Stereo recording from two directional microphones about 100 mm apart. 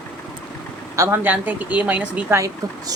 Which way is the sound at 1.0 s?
20° right (ahead or behind).